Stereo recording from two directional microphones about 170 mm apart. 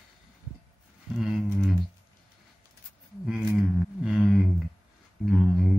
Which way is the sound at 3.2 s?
5° right (ahead or behind).